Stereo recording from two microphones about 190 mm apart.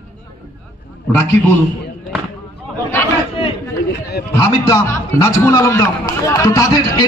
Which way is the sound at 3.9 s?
60° left (ahead or behind).